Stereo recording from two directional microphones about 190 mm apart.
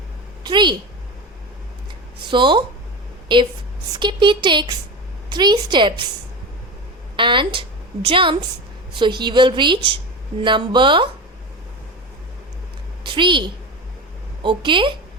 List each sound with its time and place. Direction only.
0.4 s a woman's voice: 25° right (ahead or behind)
2.3 s a woman's voice: 25° right (ahead or behind)
7.2 s a woman's voice: 25° right (ahead or behind)
13.1 s a woman's voice: 25° right (ahead or behind)